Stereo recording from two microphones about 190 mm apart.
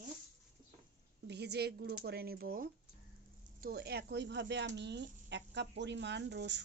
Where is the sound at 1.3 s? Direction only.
60° right (ahead or behind).